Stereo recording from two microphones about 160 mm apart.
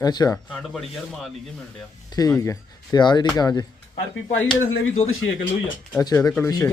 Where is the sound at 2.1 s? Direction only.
20° left (ahead or behind).